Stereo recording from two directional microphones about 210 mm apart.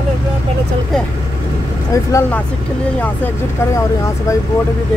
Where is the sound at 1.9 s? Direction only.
15° left (ahead or behind).